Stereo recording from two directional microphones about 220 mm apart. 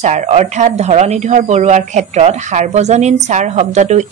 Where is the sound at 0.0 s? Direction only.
30° right (ahead or behind).